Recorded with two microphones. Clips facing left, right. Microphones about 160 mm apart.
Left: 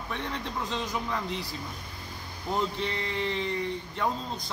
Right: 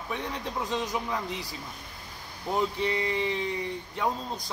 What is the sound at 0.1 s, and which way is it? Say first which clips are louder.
Speech: right 1 dB; 10° right (ahead or behind).